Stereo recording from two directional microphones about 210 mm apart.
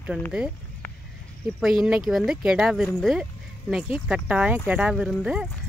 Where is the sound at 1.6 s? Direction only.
Centre (ahead or behind).